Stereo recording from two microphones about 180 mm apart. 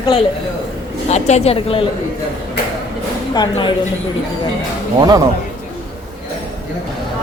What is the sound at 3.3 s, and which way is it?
Speech, 25° left (ahead or behind).